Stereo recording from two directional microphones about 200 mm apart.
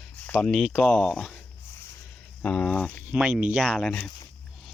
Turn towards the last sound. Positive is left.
turn(degrees=0)  # may be behind; listen again after turning